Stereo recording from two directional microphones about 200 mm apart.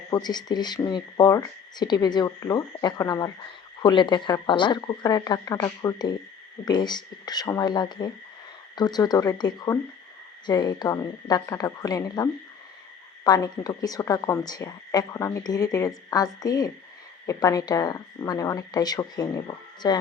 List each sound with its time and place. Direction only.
0.1 s a woman's voice: 20° left (ahead or behind)